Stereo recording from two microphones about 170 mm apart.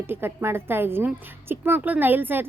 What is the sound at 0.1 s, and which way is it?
A woman's voice, 15° right (ahead or behind).